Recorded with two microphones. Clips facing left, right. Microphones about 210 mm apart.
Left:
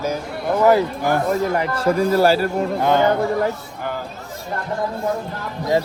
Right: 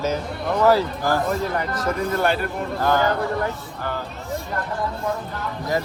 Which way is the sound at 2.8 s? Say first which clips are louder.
Left 3 dB; 20° left (ahead or behind).